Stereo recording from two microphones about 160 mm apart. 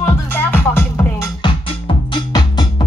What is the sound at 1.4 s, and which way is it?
Music, 30° left (ahead or behind).